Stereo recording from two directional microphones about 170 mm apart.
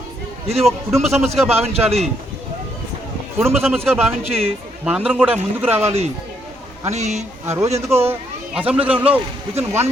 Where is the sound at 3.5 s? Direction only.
Centre (ahead or behind).